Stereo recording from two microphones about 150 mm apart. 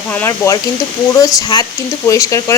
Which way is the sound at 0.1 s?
15° left (ahead or behind).